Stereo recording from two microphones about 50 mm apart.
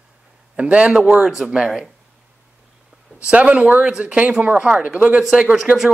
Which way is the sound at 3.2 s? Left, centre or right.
Right.